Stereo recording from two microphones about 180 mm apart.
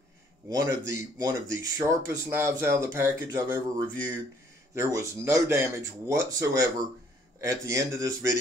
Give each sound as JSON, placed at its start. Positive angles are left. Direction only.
{"t": 0.5, "sound": "speech", "side_deg": -20}